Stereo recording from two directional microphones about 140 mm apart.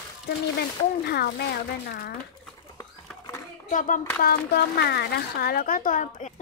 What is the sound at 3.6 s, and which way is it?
Speech, 70° left (ahead or behind).